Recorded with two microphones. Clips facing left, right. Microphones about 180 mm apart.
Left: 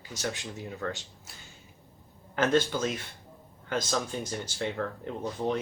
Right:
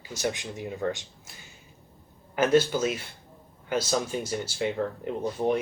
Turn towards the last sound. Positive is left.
turn(degrees=-15)  # may be behind; listen again after turning